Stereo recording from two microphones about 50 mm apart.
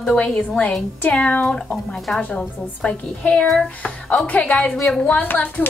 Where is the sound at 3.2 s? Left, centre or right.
Left.